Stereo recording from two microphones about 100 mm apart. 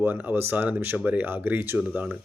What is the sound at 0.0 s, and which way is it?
Speech, 20° right (ahead or behind).